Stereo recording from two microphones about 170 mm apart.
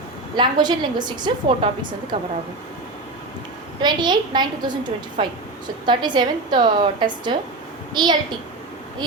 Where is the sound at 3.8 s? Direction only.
25° right (ahead or behind).